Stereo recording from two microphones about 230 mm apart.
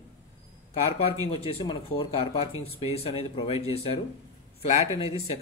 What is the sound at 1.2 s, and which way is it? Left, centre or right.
A man's voice, left.